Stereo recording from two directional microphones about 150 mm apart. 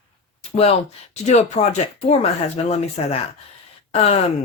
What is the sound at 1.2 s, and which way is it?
Speech, 45° left (ahead or behind).